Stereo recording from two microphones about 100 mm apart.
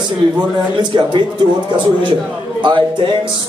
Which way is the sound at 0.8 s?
50° right (ahead or behind).